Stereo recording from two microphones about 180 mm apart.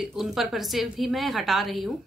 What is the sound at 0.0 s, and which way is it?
A woman's voice, 5° right (ahead or behind).